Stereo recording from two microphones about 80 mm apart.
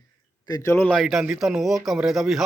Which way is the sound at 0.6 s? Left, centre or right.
Left.